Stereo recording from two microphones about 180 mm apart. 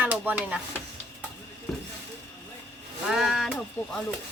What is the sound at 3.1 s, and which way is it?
Speech, centre (ahead or behind).